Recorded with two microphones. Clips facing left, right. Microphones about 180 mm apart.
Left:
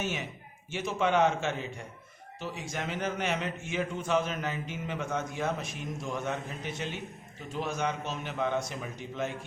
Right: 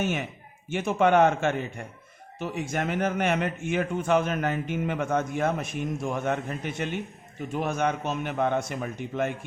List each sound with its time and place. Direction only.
0.0 s a man's voice: 55° right (ahead or behind)